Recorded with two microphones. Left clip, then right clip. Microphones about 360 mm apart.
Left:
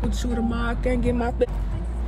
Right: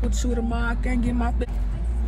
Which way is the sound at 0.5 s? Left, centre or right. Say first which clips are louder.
Left 2 dB; centre.